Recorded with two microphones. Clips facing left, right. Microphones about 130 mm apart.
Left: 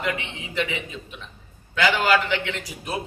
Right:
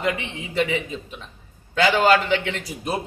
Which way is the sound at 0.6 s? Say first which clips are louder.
Right 5 dB; 40° right (ahead or behind).